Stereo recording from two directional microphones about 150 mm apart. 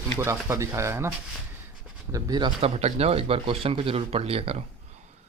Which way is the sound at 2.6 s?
45° right (ahead or behind).